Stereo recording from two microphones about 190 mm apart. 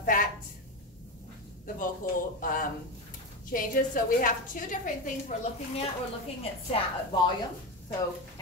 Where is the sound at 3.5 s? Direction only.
45° left (ahead or behind).